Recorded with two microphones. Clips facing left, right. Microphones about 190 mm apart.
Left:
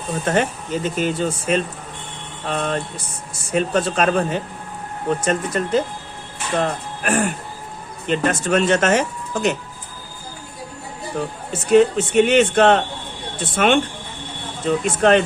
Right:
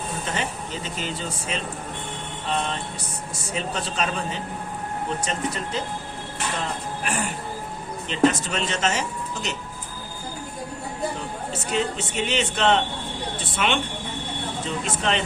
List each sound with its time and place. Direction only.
0.3 s speech: 50° left (ahead or behind)
11.7 s speech: 55° left (ahead or behind)
14.8 s speech: 55° left (ahead or behind)